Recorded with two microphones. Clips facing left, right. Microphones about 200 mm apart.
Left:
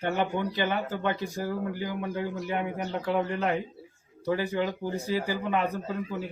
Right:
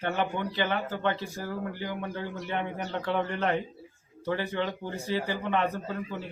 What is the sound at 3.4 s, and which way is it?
Speech, centre (ahead or behind).